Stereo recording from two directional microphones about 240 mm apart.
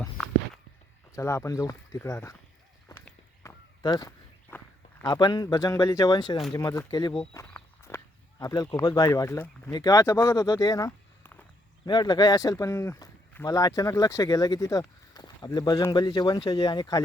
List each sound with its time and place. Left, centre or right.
0.0 s walk: centre
1.1 s speech: centre
3.0 s walk: centre
4.5 s speech: centre